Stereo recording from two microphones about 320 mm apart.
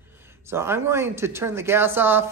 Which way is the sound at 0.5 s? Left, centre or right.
Centre.